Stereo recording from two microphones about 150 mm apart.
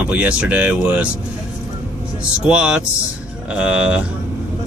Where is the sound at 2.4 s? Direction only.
5° right (ahead or behind).